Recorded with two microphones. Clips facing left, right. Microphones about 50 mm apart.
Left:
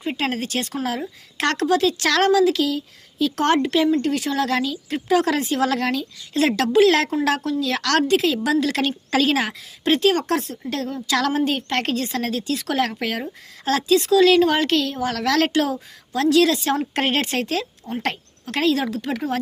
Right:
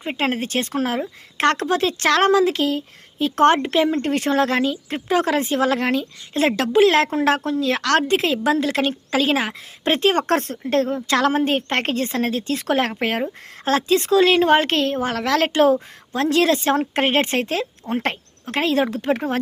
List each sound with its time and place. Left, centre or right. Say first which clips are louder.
0.0 s a woman's voice: right 2 dB; right
4.0 s a woman's voice: right 3 dB; right
8.6 s a woman's voice: right 1 dB; centre
9.8 s speech: even; right
10.7 s a woman's voice: right 5 dB; right